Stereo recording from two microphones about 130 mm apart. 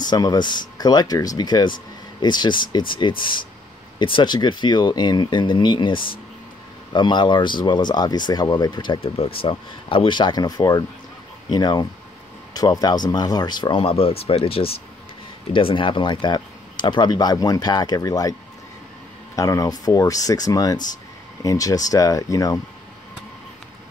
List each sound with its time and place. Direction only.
0.0 s speech: 30° left (ahead or behind)
19.3 s speech: 25° left (ahead or behind)